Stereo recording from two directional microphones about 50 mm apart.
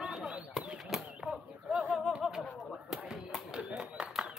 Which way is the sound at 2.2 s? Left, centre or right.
Centre.